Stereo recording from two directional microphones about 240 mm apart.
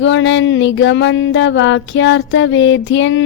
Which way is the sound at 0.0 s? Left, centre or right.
Left.